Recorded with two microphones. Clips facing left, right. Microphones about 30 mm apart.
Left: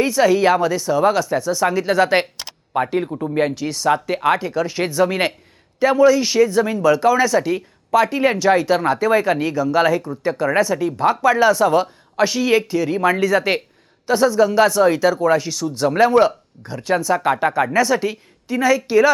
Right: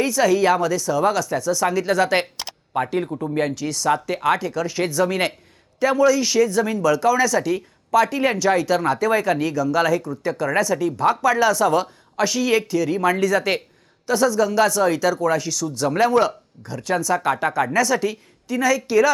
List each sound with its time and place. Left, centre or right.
0.0 s speech: centre